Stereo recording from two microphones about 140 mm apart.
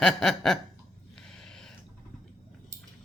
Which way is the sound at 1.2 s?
5° left (ahead or behind).